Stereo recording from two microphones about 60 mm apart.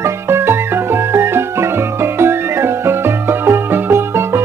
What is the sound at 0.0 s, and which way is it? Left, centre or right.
Music, right.